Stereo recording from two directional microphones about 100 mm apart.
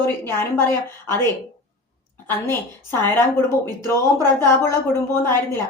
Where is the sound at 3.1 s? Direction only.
25° left (ahead or behind).